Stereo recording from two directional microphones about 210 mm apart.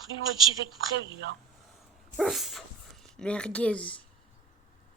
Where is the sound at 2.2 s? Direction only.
Centre (ahead or behind).